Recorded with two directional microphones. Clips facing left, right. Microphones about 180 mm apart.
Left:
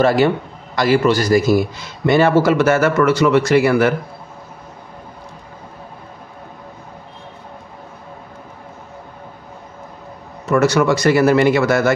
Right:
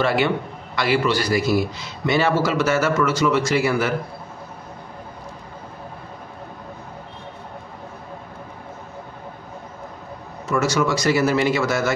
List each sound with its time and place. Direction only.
0.0 s a man's voice: 40° left (ahead or behind); by 3.9 s 60° left (ahead or behind)
10.5 s a man's voice: 65° left (ahead or behind)